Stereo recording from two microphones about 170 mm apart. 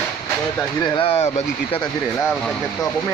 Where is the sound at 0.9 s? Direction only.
35° left (ahead or behind).